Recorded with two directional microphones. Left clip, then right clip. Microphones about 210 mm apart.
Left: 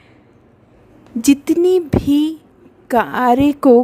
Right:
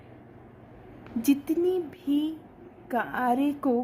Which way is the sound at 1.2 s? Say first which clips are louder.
Left 12 dB; 50° left (ahead or behind).